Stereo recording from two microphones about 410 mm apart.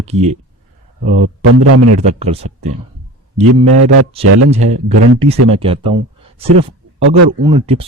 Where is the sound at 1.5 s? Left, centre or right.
Right.